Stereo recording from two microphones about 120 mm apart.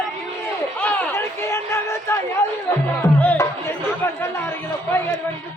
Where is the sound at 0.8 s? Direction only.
20° left (ahead or behind).